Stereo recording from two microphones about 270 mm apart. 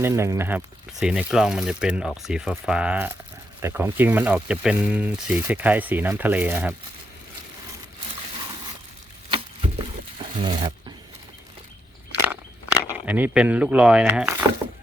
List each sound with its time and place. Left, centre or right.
0.0 s speech: centre
9.3 s a sound: centre
12.9 s speech: centre